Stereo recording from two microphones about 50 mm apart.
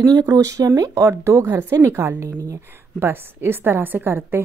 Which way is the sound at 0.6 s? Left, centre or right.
Right.